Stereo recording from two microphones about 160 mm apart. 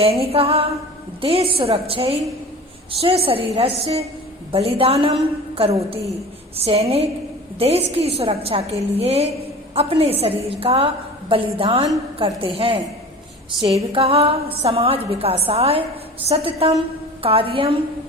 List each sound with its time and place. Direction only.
0.0 s a woman's voice: 40° right (ahead or behind)